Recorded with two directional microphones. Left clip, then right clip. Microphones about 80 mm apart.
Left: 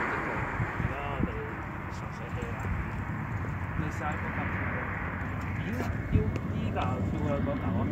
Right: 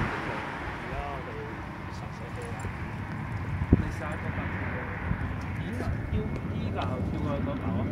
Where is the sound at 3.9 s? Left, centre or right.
Right.